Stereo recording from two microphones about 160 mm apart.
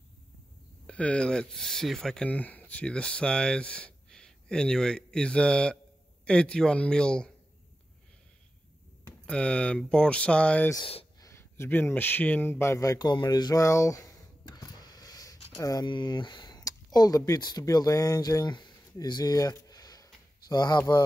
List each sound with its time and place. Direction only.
0.8 s speech: 5° left (ahead or behind)
9.2 s speech: 5° left (ahead or behind)
11.1 s speech: 20° left (ahead or behind)